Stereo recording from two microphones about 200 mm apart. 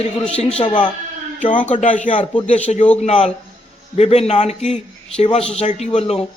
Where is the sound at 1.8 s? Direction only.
40° left (ahead or behind).